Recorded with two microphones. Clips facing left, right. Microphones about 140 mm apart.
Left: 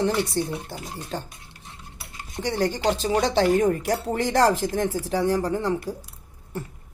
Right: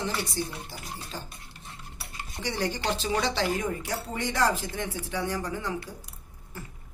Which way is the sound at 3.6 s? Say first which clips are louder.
Left 9 dB; 40° left (ahead or behind).